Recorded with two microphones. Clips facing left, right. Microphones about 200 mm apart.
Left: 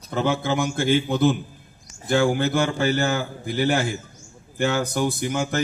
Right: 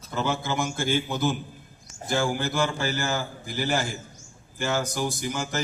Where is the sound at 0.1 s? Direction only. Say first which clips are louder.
Left 5 dB; 55° left (ahead or behind).